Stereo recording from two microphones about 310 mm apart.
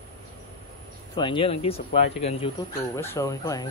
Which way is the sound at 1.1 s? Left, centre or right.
Centre.